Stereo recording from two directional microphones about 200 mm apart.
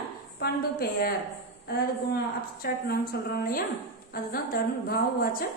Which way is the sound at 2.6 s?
50° left (ahead or behind).